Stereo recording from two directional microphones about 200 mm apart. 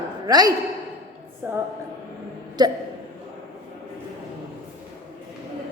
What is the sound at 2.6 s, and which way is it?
Speech, 20° right (ahead or behind).